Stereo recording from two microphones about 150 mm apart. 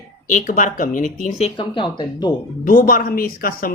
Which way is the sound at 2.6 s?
65° left (ahead or behind).